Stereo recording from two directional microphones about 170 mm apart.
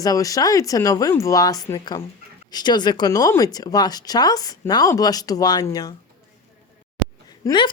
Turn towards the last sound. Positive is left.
turn(degrees=25)  # may be behind; listen again after turning